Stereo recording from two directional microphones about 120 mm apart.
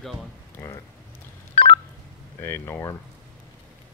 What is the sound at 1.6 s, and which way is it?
Telephone dialing, 50° left (ahead or behind).